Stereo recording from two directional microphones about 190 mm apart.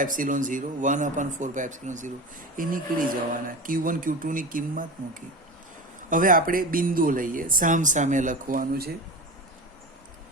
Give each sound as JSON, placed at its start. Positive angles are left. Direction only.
{"t": 0.0, "sound": "speech", "side_deg": -45}
{"t": 6.1, "sound": "speech", "side_deg": -45}